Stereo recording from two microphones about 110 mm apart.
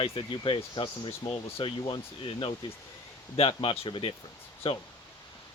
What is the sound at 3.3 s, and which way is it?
Speech, 60° left (ahead or behind).